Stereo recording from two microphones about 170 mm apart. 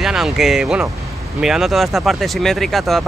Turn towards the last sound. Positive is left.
turn(degrees=0)  # may be behind; listen again after turning